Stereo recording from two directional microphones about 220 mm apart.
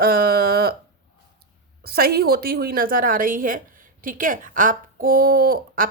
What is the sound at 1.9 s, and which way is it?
Speech, 45° right (ahead or behind).